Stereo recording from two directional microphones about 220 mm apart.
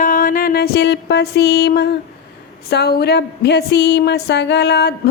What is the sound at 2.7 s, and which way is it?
A woman's voice, 45° left (ahead or behind).